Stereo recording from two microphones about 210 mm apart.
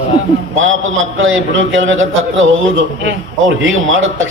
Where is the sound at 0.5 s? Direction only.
65° right (ahead or behind).